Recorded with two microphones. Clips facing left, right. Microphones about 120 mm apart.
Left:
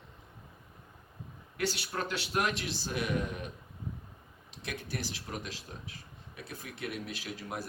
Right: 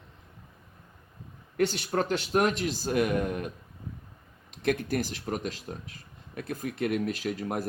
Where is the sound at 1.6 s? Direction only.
45° right (ahead or behind).